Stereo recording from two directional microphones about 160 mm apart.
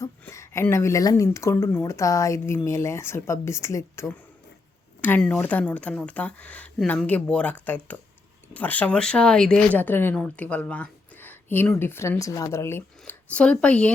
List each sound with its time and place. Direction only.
0.0 s speech: 15° left (ahead or behind)